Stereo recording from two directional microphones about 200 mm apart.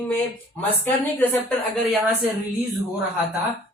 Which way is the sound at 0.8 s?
10° left (ahead or behind).